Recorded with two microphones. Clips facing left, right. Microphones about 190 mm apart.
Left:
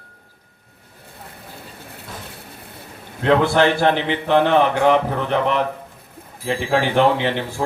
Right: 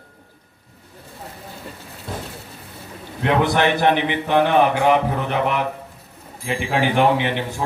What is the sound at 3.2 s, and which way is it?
A man's voice, 20° right (ahead or behind).